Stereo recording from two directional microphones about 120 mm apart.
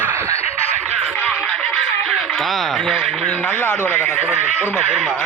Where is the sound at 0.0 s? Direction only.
15° right (ahead or behind).